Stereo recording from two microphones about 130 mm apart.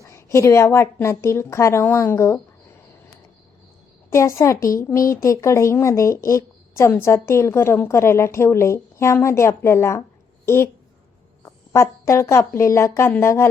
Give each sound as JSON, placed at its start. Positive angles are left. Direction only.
{"t": 0.0, "sound": "a woman's voice", "side_deg": 20}
{"t": 4.1, "sound": "speech", "side_deg": 25}